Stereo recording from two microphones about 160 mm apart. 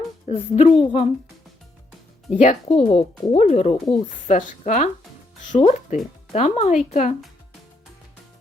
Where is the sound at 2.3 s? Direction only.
45° left (ahead or behind).